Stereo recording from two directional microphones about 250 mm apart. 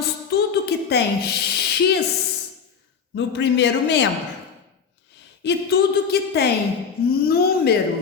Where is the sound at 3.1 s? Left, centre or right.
Left.